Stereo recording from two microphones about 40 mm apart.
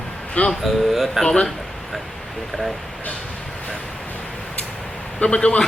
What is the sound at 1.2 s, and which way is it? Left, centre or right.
Speech, centre.